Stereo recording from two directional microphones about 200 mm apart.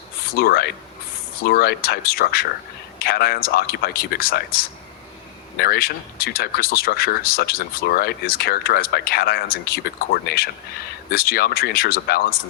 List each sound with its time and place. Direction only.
0.3 s speech: 50° left (ahead or behind)